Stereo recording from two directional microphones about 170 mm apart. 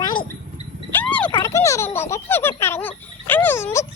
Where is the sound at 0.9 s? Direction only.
10° left (ahead or behind).